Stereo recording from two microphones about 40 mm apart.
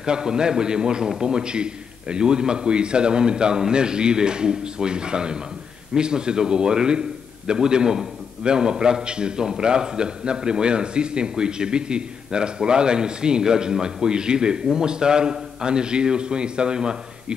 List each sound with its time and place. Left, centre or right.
0.0 s a man's voice: centre